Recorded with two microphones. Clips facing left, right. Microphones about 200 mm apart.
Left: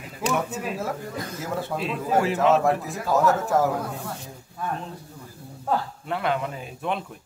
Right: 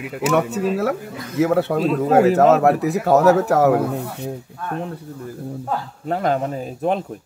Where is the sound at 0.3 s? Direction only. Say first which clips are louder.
Right 8 dB; 70° right (ahead or behind).